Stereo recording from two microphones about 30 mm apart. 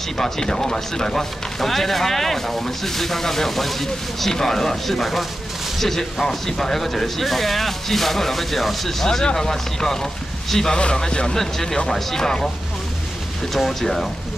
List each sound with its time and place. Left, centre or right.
0.2 s speech: centre
10.7 s speech: left
11.3 s speech: centre
13.7 s speech: centre